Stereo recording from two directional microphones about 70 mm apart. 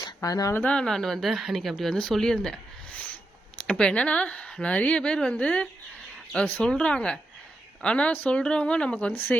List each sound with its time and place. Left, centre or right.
0.0 s a sound: left
0.5 s speech: left
0.8 s speech: centre
3.6 s speech: centre